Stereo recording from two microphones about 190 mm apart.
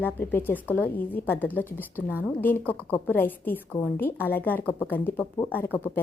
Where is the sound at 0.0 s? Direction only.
10° left (ahead or behind).